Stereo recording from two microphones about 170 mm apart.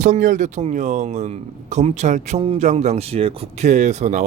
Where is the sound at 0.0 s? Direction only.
50° right (ahead or behind).